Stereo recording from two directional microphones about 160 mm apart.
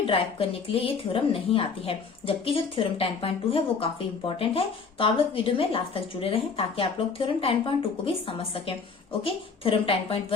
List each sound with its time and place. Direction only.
0.1 s a woman's voice: 35° left (ahead or behind)